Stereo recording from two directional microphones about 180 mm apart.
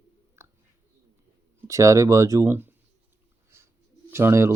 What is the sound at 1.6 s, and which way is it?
Speech, 15° right (ahead or behind).